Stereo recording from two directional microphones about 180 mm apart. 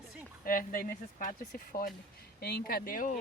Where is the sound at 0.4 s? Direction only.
50° left (ahead or behind).